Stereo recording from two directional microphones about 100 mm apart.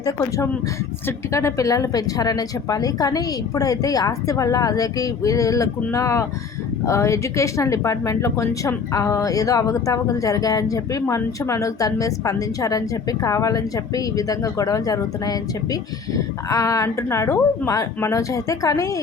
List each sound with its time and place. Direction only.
1.0 s a woman's voice: 30° left (ahead or behind)